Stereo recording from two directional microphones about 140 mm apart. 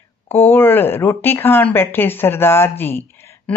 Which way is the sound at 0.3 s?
15° left (ahead or behind).